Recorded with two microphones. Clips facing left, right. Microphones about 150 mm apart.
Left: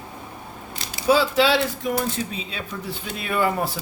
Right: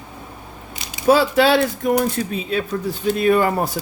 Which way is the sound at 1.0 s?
55° right (ahead or behind).